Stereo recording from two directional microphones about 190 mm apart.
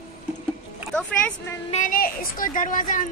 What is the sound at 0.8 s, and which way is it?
Speech, 5° left (ahead or behind).